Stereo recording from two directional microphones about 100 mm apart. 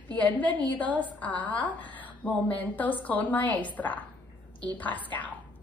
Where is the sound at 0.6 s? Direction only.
15° left (ahead or behind).